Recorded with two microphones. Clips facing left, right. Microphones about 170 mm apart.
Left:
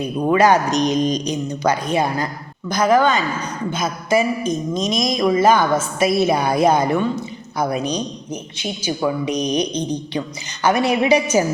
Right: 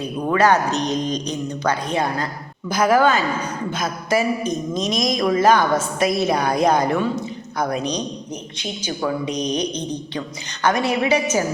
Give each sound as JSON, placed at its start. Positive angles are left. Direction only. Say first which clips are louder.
{"t": 0.3, "sound": "speech", "louder": "left 2 dB", "side_deg": 15}
{"t": 2.6, "sound": "a woman's voice", "louder": "left 1 dB", "side_deg": -5}